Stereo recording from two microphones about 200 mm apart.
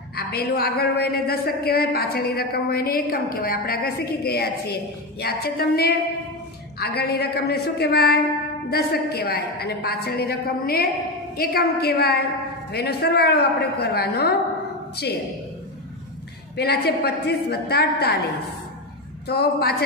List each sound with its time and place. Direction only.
0.1 s a woman's voice: 50° left (ahead or behind)
16.5 s a woman's voice: 55° left (ahead or behind)
19.2 s a woman's voice: 55° left (ahead or behind)